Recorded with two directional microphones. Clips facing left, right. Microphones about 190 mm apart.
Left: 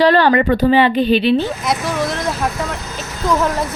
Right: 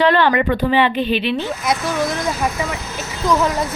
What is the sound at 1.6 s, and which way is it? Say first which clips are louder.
Speech: even; centre (ahead or behind).